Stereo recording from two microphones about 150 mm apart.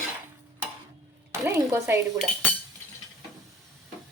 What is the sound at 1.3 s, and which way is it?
Speech, 15° right (ahead or behind).